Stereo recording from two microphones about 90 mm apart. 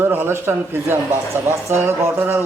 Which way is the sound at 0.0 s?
25° right (ahead or behind).